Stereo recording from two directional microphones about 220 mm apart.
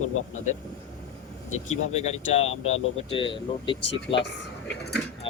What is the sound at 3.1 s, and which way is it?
Speech, 20° left (ahead or behind).